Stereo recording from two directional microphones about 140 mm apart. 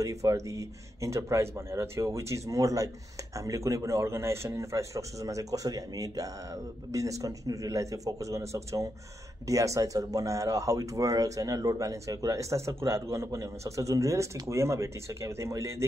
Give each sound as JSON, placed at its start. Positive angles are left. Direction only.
{"t": 0.0, "sound": "speech", "side_deg": -25}